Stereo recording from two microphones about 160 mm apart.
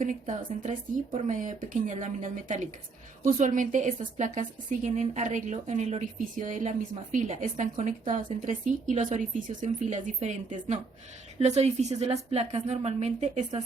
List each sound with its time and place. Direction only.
0.0 s a woman's voice: 50° right (ahead or behind)